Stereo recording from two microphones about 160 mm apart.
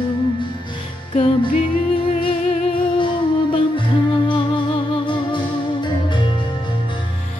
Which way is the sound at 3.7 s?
30° left (ahead or behind).